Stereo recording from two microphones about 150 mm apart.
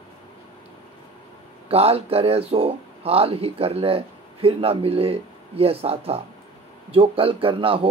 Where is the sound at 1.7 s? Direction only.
40° right (ahead or behind).